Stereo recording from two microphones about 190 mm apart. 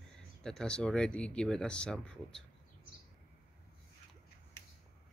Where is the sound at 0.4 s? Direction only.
5° left (ahead or behind).